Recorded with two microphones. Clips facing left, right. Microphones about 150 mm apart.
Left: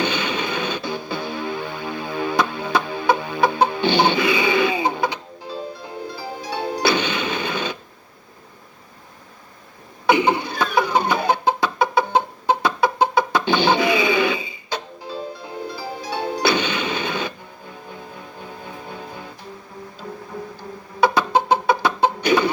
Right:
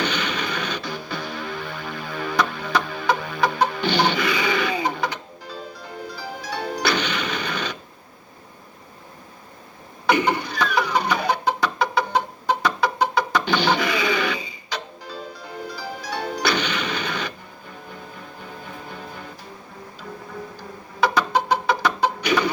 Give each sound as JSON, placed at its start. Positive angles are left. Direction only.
{"t": 0.0, "sound": "music", "side_deg": 25}
{"t": 10.1, "sound": "a sound", "side_deg": 20}
{"t": 15.7, "sound": "music", "side_deg": 25}
{"t": 21.0, "sound": "chicken", "side_deg": 25}